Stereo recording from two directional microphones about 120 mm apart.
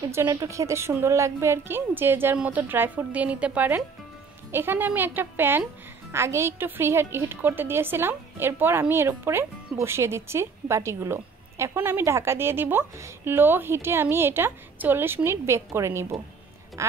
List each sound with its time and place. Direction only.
0.1 s a woman's voice: 25° right (ahead or behind)